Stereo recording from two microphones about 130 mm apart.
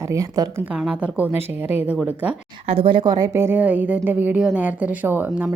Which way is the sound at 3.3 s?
15° right (ahead or behind).